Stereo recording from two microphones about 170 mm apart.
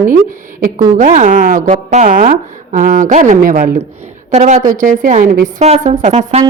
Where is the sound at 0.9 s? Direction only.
50° right (ahead or behind).